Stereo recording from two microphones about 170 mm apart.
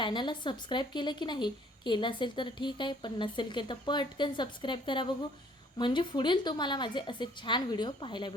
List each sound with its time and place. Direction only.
0.0 s a woman's voice: 30° left (ahead or behind)